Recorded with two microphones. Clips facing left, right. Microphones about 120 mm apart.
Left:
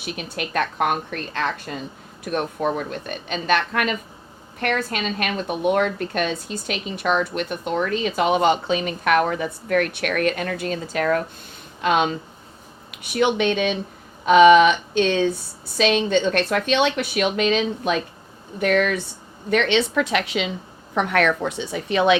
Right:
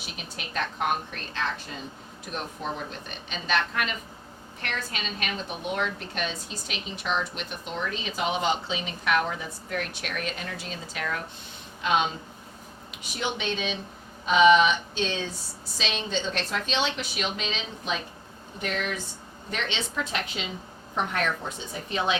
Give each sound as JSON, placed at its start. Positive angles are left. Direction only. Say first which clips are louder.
{"t": 0.0, "sound": "a woman's voice", "louder": "left 10 dB", "side_deg": 55}